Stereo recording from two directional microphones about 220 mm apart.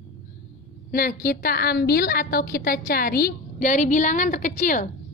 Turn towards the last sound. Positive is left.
turn(degrees=35)  # may be behind; listen again after turning